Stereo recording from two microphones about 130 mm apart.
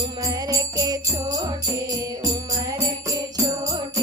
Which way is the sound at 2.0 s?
25° right (ahead or behind).